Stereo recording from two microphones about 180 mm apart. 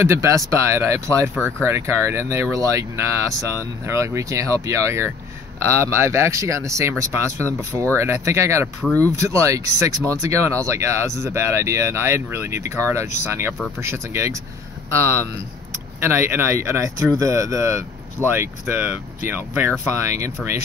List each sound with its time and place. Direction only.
0.0 s speech: 15° right (ahead or behind)
8.8 s speech: 10° left (ahead or behind)
9.1 s speech: 15° right (ahead or behind)
16.0 s speech: 15° right (ahead or behind)